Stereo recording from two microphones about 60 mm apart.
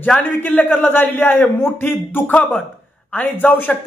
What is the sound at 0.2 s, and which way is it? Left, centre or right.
Speech, left.